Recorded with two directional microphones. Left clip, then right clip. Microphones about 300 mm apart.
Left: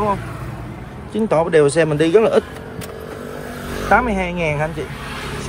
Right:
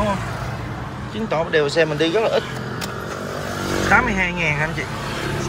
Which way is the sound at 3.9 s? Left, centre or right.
Centre.